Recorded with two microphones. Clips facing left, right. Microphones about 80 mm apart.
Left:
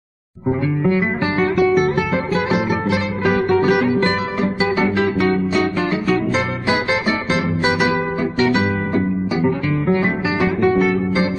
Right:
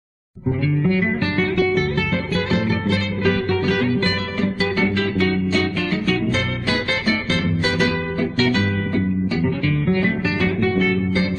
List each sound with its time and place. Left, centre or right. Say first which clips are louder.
0.8 s guitar: left 3 dB; left
1.7 s music: left 4 dB; centre
10.8 s guitar: left 3 dB; centre